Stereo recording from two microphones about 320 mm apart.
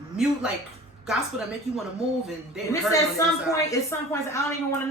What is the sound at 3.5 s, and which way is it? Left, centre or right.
A woman's voice, centre.